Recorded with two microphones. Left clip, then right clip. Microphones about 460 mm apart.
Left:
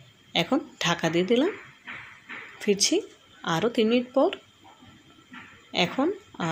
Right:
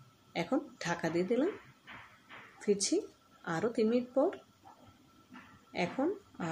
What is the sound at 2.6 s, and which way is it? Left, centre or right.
Speech, left.